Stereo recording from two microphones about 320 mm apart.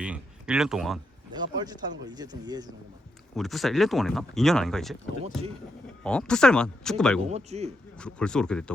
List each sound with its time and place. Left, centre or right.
0.0 s speech: centre
1.3 s speech: centre
3.3 s speech: centre
6.0 s speech: centre
7.2 s a man's voice: centre
7.9 s speech: centre